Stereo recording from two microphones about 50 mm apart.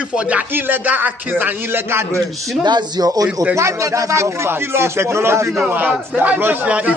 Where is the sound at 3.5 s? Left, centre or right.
Right.